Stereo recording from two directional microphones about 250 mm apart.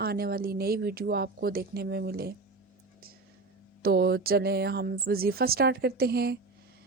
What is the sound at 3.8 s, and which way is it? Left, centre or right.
Speech, right.